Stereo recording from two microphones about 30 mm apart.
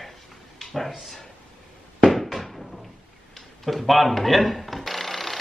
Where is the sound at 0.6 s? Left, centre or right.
Centre.